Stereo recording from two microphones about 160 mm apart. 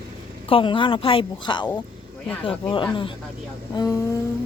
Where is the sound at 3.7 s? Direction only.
20° left (ahead or behind).